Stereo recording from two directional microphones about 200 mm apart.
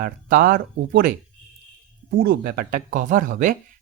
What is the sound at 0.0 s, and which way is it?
Speech, 45° right (ahead or behind).